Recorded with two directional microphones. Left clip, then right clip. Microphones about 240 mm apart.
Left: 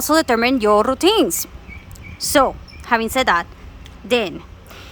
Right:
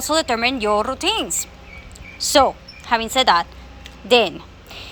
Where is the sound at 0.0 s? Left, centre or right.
Left.